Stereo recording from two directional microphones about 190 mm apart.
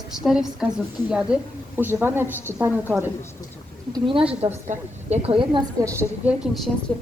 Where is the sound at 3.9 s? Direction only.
25° right (ahead or behind).